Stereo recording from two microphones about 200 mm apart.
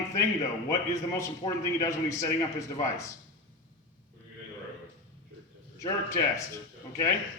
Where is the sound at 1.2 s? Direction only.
15° left (ahead or behind).